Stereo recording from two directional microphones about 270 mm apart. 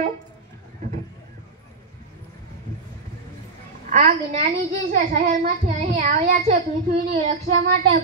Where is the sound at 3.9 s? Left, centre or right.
Right.